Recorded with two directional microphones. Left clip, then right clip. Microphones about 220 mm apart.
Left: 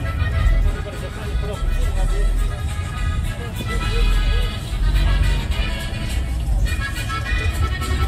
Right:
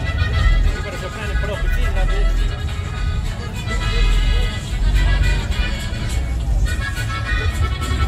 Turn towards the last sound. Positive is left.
turn(degrees=45)  # may be behind; listen again after turning